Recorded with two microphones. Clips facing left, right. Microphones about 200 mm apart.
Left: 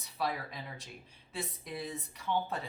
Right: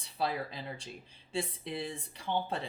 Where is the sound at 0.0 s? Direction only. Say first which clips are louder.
Right 2 dB; 30° right (ahead or behind).